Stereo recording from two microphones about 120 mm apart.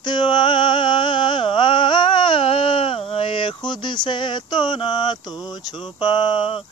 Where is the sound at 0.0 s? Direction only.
40° left (ahead or behind).